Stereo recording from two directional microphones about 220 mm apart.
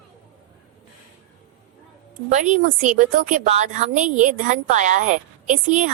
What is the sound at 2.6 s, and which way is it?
A woman's voice, 35° right (ahead or behind).